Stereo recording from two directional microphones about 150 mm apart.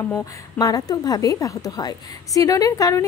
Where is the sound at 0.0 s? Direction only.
20° left (ahead or behind).